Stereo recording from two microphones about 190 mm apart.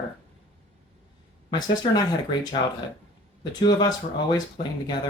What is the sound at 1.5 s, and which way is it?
Speech, 20° left (ahead or behind).